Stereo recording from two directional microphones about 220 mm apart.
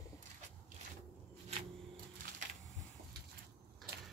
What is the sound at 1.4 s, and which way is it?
Printer, 35° right (ahead or behind).